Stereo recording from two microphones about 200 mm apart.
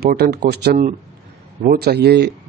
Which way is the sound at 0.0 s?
50° right (ahead or behind).